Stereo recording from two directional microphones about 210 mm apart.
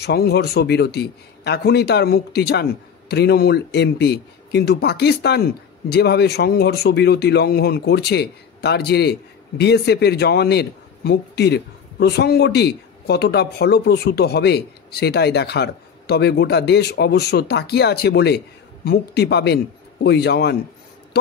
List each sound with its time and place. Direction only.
0.0 s a man's voice: 50° left (ahead or behind)